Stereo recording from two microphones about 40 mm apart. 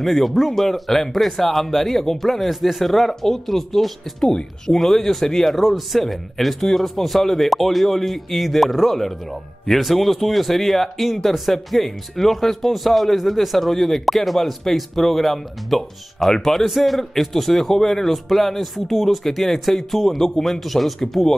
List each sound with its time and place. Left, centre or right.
0.0 s speech: centre